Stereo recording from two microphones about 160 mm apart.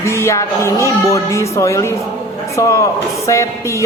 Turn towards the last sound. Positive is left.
turn(degrees=20)  # may be behind; listen again after turning